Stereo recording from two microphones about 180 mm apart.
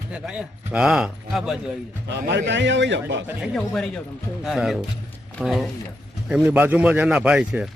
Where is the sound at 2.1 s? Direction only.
75° right (ahead or behind).